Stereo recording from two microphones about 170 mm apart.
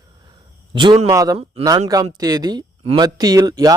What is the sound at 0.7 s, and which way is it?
Speech, 25° right (ahead or behind).